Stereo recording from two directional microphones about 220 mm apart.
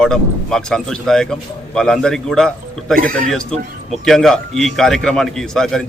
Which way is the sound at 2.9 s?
40° right (ahead or behind).